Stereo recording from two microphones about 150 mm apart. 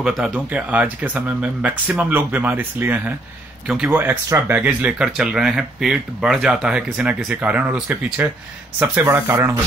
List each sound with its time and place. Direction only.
0.0 s speech: 5° right (ahead or behind)